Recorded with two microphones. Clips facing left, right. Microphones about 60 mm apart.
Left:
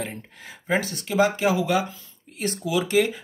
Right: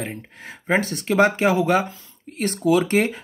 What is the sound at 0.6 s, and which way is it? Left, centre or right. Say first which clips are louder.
Speech: right 4 dB; right.